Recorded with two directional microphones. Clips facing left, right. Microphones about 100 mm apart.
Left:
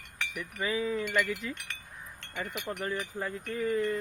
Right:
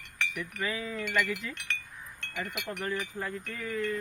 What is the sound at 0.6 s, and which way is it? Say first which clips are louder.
Speech: left 5 dB; 20° left (ahead or behind).